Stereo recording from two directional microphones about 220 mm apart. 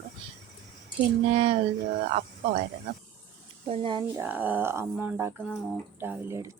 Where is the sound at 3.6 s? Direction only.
25° right (ahead or behind).